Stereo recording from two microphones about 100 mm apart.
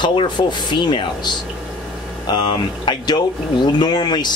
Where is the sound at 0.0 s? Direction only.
55° left (ahead or behind).